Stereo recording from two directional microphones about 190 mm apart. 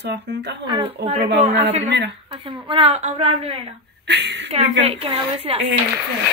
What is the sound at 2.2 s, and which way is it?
Speech, 25° right (ahead or behind).